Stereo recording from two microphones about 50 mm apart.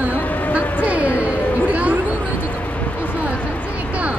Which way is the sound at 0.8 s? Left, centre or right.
Right.